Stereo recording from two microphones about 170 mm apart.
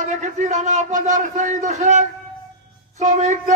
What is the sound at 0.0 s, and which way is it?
A man's voice, 45° right (ahead or behind).